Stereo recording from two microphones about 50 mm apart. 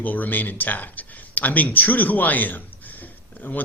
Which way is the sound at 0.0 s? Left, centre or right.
Left.